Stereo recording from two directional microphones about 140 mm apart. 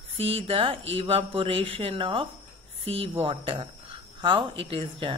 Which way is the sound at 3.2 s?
40° right (ahead or behind).